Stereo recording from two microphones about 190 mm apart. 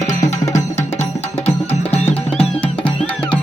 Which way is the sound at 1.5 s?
35° left (ahead or behind).